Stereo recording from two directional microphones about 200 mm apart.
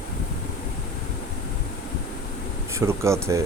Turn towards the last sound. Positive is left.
turn(degrees=-15)  # may be behind; listen again after turning